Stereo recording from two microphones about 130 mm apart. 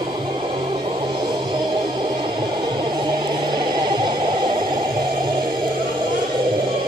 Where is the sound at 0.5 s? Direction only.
50° right (ahead or behind).